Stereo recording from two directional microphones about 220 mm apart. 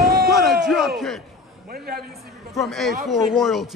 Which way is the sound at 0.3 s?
Centre (ahead or behind).